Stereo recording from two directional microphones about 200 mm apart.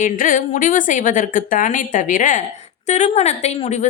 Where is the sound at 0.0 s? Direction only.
40° left (ahead or behind).